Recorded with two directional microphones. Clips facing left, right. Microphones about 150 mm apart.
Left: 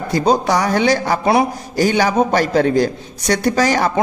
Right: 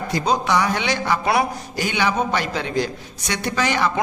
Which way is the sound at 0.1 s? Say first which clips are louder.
Left 5 dB; 35° left (ahead or behind).